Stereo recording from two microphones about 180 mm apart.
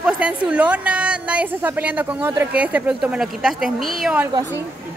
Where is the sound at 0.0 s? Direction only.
5° right (ahead or behind).